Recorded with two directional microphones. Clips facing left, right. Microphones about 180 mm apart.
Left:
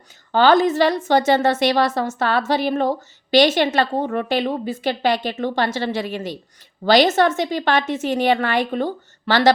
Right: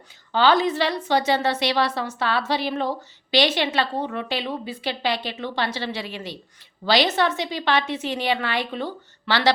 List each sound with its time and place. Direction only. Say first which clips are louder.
0.3 s a woman's voice: left 4 dB; 45° left (ahead or behind)